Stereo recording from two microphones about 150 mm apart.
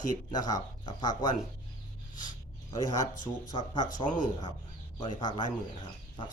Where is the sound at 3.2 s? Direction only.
30° left (ahead or behind).